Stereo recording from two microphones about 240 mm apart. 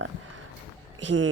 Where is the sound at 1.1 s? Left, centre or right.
Right.